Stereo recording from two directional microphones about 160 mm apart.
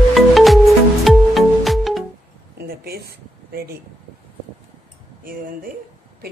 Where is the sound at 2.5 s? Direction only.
75° right (ahead or behind).